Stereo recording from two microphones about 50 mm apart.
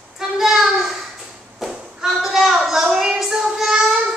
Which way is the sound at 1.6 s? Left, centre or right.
Centre.